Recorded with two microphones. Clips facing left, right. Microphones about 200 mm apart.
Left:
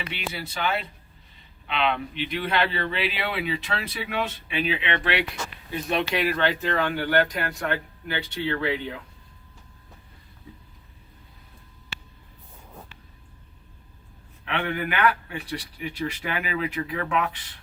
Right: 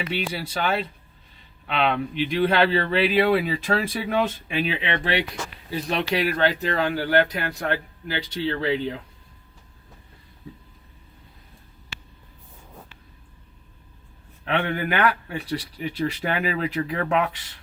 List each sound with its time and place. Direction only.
0.1 s speech: 40° right (ahead or behind)
14.4 s speech: 35° right (ahead or behind)